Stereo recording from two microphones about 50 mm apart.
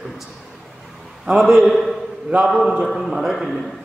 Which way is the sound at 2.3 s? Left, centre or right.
Right.